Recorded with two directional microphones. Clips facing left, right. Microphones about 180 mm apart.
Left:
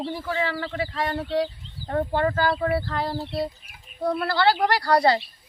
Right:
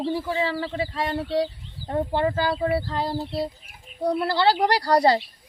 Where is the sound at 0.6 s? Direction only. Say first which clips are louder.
Right 1 dB; 25° right (ahead or behind).